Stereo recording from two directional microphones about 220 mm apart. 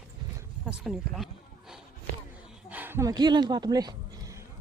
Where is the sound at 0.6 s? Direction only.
5° right (ahead or behind).